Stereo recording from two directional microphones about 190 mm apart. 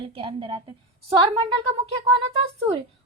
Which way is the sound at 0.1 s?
25° right (ahead or behind).